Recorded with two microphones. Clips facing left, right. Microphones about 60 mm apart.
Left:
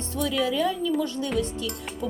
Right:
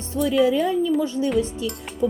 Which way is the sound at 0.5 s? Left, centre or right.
Right.